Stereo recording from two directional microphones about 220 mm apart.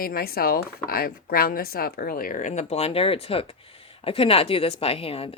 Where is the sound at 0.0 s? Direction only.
45° left (ahead or behind).